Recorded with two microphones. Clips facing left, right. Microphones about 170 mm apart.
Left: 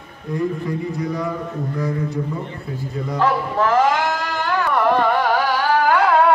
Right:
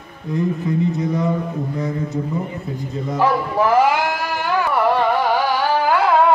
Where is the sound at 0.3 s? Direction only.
20° right (ahead or behind).